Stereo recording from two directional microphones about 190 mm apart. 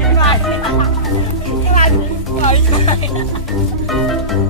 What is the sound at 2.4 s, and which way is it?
Music, 35° left (ahead or behind).